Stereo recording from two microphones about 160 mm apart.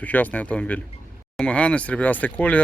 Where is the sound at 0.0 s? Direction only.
10° left (ahead or behind).